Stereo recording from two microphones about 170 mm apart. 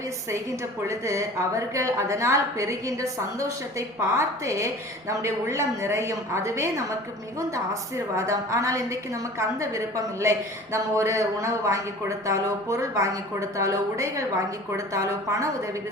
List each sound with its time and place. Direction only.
0.9 s a man's voice: 15° right (ahead or behind)